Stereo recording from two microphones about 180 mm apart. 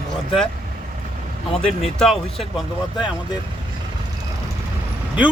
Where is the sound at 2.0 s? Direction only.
Centre (ahead or behind).